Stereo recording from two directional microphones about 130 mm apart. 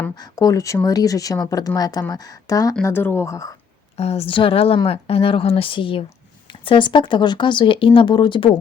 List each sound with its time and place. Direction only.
0.2 s speech: 30° left (ahead or behind)
2.8 s speech: 20° left (ahead or behind)
3.9 s speech: 55° left (ahead or behind); by 8.4 s 35° left (ahead or behind)